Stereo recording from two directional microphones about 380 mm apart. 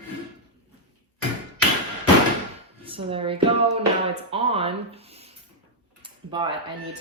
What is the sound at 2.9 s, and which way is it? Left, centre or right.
Speech, centre.